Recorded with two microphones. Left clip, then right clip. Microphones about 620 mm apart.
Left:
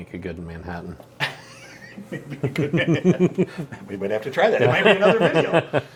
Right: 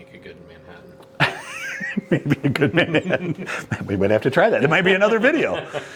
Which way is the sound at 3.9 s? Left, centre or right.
Right.